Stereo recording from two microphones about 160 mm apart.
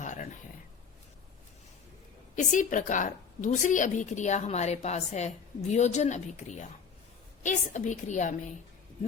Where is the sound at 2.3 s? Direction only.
50° left (ahead or behind).